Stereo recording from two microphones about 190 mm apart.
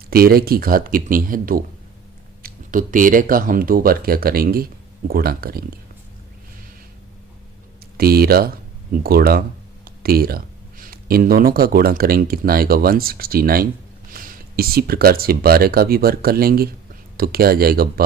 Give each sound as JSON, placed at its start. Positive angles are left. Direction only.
{"t": 0.1, "sound": "speech", "side_deg": -55}
{"t": 7.9, "sound": "speech", "side_deg": -55}